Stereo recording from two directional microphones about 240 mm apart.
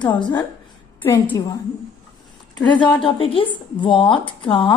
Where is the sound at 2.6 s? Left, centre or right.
Centre.